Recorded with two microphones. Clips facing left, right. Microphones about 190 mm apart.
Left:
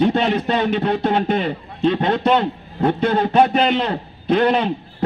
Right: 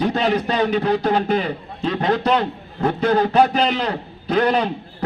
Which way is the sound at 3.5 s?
5° left (ahead or behind).